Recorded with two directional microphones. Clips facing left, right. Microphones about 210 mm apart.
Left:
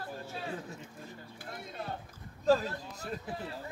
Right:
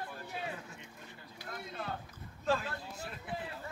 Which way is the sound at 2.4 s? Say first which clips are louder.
Left 7 dB; 40° left (ahead or behind).